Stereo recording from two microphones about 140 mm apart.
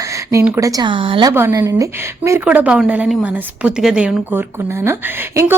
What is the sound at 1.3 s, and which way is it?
A woman's voice, 15° right (ahead or behind).